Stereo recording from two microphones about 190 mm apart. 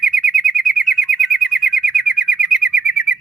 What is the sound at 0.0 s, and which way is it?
Bird, centre (ahead or behind).